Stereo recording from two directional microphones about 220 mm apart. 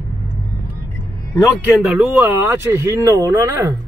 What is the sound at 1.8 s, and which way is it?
Speech, 5° right (ahead or behind).